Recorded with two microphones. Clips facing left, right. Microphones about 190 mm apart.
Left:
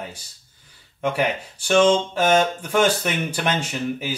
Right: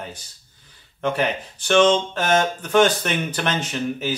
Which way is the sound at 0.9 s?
10° left (ahead or behind).